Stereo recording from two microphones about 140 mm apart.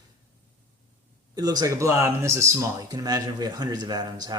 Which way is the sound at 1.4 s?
25° right (ahead or behind).